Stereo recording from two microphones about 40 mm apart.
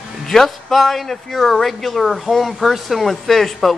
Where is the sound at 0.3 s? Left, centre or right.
Centre.